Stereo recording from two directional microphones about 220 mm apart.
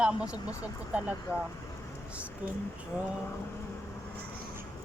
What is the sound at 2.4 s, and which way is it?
Speech, 5° right (ahead or behind).